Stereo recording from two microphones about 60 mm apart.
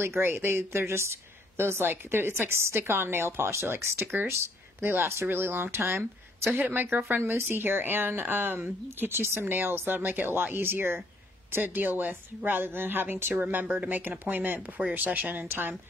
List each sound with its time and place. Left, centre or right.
0.0 s speech: right